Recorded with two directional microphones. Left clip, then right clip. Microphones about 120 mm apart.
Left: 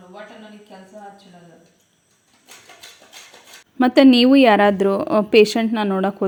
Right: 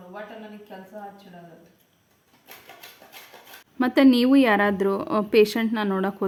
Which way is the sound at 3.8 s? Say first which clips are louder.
Left 6 dB; 30° left (ahead or behind).